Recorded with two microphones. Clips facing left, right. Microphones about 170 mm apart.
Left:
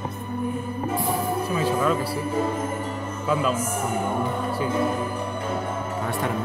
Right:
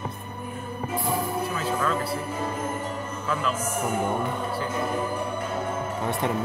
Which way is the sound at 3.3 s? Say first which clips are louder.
Left 5 dB; 15° left (ahead or behind).